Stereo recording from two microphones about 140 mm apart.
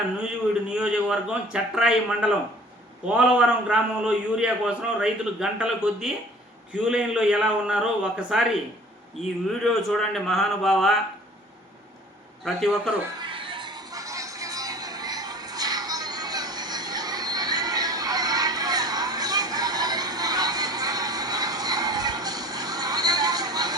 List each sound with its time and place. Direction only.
0.7 s a man's voice: 5° right (ahead or behind)
12.5 s a man's voice: centre (ahead or behind)
13.1 s music: 35° right (ahead or behind)